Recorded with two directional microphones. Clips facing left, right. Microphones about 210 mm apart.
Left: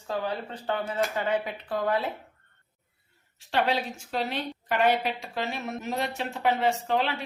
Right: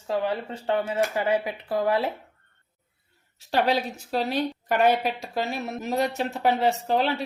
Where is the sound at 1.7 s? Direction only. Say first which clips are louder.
Right 3 dB; 25° right (ahead or behind).